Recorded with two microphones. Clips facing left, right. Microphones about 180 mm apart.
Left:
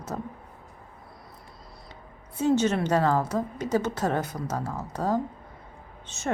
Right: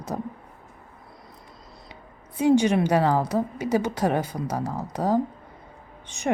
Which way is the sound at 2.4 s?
15° right (ahead or behind).